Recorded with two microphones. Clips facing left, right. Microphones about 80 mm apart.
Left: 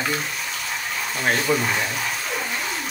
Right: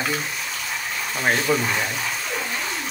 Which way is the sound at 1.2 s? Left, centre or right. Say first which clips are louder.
Even; centre.